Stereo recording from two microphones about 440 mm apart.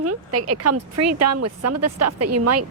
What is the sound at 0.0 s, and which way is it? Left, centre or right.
Speech, right.